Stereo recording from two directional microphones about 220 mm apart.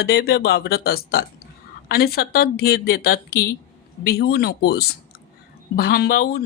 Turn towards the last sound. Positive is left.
turn(degrees=45)  # may be behind; listen again after turning